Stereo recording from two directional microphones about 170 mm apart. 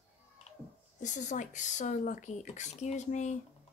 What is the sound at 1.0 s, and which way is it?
Speech, 45° left (ahead or behind).